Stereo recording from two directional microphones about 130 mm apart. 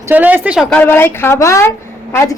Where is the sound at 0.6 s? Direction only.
5° left (ahead or behind).